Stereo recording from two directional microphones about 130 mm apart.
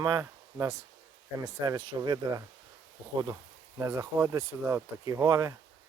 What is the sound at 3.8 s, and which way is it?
Speech, 20° right (ahead or behind).